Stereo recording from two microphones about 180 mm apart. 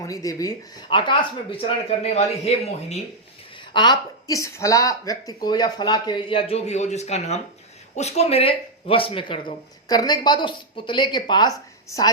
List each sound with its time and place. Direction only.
0.0 s speech: 20° left (ahead or behind); by 3.0 s 35° left (ahead or behind)
3.7 s speech: 25° left (ahead or behind)